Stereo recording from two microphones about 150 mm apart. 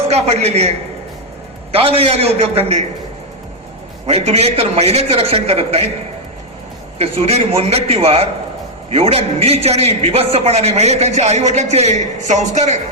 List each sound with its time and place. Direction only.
0.1 s a man's voice: 45° right (ahead or behind)
4.0 s a man's voice: 45° right (ahead or behind)
7.0 s a man's voice: 40° right (ahead or behind)